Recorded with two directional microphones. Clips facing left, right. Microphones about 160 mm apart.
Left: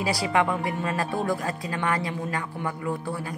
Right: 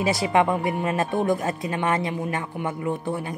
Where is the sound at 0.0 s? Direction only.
20° right (ahead or behind).